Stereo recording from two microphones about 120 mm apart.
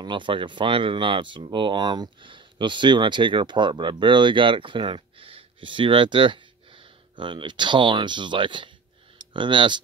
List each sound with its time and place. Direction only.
0.0 s speech: 40° right (ahead or behind)